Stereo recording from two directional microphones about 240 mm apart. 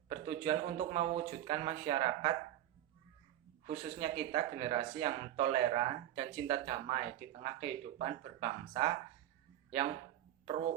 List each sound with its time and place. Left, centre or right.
0.1 s speech: right
3.7 s speech: right
10.4 s speech: right